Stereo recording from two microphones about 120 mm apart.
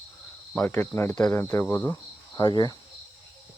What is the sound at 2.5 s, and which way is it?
Speech, 35° left (ahead or behind).